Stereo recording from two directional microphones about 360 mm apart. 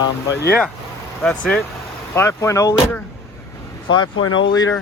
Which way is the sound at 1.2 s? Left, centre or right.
Centre.